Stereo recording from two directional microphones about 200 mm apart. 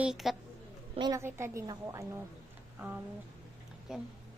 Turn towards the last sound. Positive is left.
turn(degrees=0)  # may be behind; listen again after turning